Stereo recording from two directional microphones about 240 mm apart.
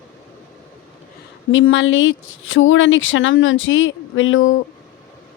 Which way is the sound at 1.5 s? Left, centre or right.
Left.